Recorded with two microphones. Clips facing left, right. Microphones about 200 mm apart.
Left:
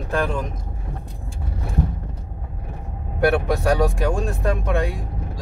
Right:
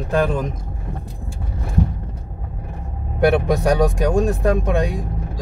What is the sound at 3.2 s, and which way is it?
Speech, 20° right (ahead or behind).